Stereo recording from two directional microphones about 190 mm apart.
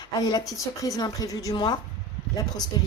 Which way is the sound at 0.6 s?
15° left (ahead or behind).